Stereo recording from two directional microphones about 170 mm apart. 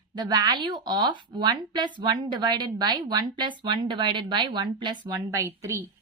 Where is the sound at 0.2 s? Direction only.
25° right (ahead or behind).